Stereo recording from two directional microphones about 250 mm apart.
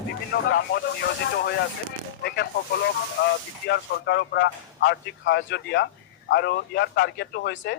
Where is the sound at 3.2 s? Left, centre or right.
Left.